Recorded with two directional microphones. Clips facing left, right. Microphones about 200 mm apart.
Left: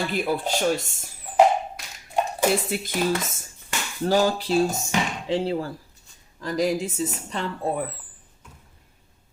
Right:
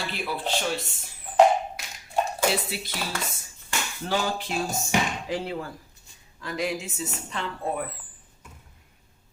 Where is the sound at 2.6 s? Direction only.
50° left (ahead or behind).